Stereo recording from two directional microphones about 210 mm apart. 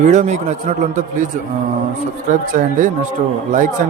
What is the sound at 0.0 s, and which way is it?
Speech, 35° right (ahead or behind).